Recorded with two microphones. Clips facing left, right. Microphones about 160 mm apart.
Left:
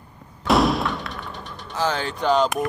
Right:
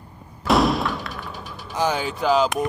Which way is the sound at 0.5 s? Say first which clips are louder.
Even; centre (ahead or behind).